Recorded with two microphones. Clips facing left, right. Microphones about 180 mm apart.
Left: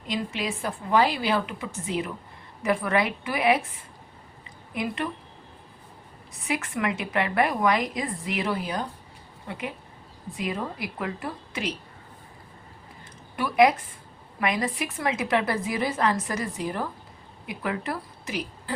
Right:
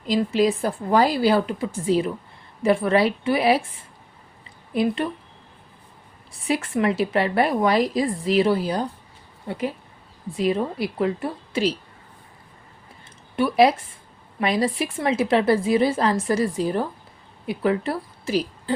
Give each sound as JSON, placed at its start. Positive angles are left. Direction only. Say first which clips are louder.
{"t": 0.1, "sound": "a woman's voice", "louder": "right 10 dB", "side_deg": -35}
{"t": 4.7, "sound": "a woman's voice", "louder": "right 8 dB", "side_deg": -30}
{"t": 6.3, "sound": "a woman's voice", "louder": "right 6 dB", "side_deg": -30}
{"t": 13.3, "sound": "a woman's voice", "louder": "right 3 dB", "side_deg": -30}